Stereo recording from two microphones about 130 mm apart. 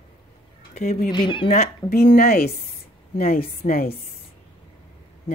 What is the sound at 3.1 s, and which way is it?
Speech, 90° left.